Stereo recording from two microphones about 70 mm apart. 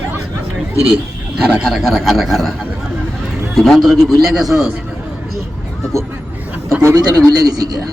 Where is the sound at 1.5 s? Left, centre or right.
Centre.